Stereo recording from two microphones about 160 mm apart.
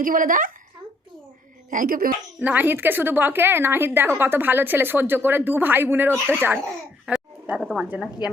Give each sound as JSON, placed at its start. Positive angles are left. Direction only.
{"t": 0.0, "sound": "a woman's voice", "side_deg": -55}
{"t": 1.7, "sound": "a woman's voice", "side_deg": -60}
{"t": 2.4, "sound": "a woman's voice", "side_deg": -10}
{"t": 7.0, "sound": "babbling", "side_deg": -10}
{"t": 7.7, "sound": "a woman's voice", "side_deg": -5}